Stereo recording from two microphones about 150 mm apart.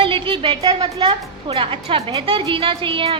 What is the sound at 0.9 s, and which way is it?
A woman's voice, 40° right (ahead or behind).